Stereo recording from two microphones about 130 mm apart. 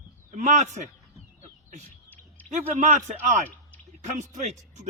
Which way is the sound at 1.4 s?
60° right (ahead or behind).